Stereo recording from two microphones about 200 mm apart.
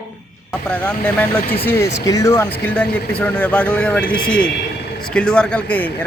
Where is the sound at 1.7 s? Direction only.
15° left (ahead or behind).